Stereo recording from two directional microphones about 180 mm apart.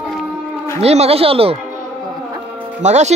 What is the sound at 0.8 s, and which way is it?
Speech, 35° right (ahead or behind).